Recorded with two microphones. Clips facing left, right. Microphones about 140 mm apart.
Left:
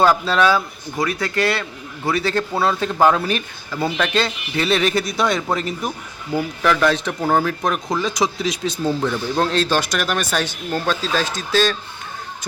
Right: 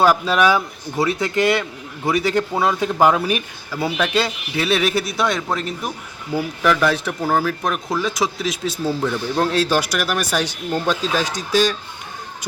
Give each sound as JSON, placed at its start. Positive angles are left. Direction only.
{"t": 0.0, "sound": "speech", "side_deg": -10}